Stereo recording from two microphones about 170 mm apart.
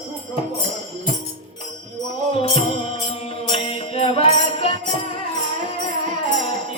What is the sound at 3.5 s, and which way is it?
Music, 35° left (ahead or behind).